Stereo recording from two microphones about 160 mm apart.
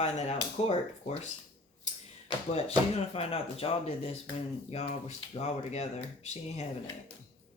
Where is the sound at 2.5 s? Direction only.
40° left (ahead or behind).